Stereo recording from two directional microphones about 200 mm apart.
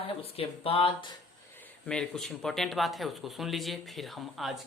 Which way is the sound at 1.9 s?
5° left (ahead or behind).